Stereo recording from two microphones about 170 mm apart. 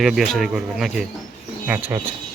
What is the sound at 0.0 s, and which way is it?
Speech, centre (ahead or behind).